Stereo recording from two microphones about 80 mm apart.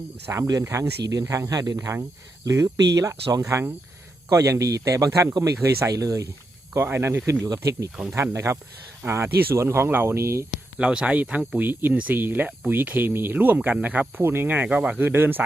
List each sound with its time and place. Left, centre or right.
0.3 s speech: right
6.7 s speech: right
7.4 s speech: right
10.8 s speech: centre
15.0 s speech: right